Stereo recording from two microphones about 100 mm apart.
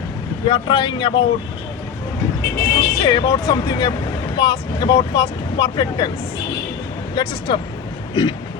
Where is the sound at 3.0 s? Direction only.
45° left (ahead or behind).